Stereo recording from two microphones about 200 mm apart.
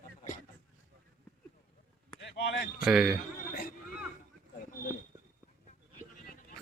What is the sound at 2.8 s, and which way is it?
Speech, centre (ahead or behind).